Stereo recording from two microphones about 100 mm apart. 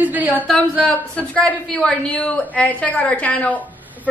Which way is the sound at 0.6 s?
10° left (ahead or behind).